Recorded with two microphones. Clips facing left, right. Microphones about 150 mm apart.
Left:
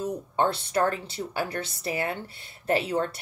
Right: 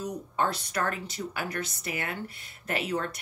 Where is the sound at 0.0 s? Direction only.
30° left (ahead or behind).